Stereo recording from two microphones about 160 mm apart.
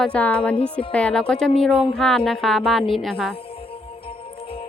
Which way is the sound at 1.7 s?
35° left (ahead or behind).